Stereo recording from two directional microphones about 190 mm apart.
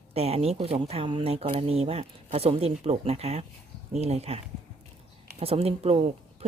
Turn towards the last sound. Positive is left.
turn(degrees=-30)  # may be behind; listen again after turning